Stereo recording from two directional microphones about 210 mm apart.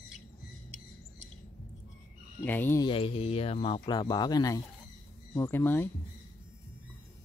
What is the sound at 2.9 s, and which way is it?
Speech, 25° left (ahead or behind).